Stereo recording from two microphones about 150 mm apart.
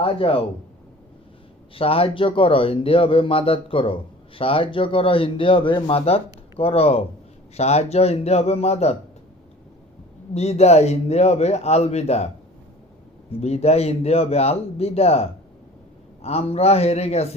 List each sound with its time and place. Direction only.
0.0 s speech: 35° left (ahead or behind)
1.7 s speech: 40° left (ahead or behind)
10.3 s speech: 45° left (ahead or behind)
13.4 s speech: 45° left (ahead or behind)